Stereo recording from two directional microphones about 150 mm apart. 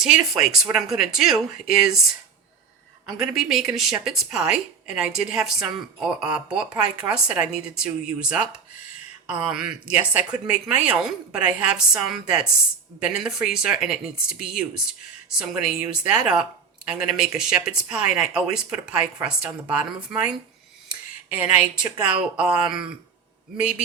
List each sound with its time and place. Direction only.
0.0 s a woman's voice: 5° right (ahead or behind)
3.2 s a woman's voice: 5° right (ahead or behind)
15.4 s a woman's voice: 5° right (ahead or behind)